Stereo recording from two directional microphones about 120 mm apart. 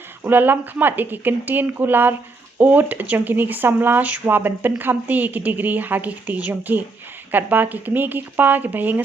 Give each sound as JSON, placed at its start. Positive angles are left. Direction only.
{"t": 0.3, "sound": "speech", "side_deg": -15}